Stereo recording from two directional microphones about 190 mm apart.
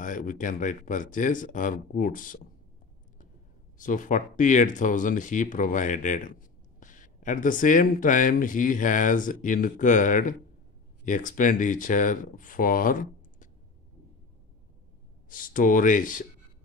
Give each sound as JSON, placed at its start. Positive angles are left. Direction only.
{"t": 0.0, "sound": "speech", "side_deg": 45}
{"t": 3.7, "sound": "speech", "side_deg": 45}
{"t": 15.2, "sound": "speech", "side_deg": 45}